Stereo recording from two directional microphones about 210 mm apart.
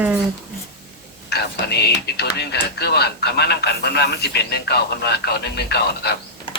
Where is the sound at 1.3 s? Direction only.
50° left (ahead or behind).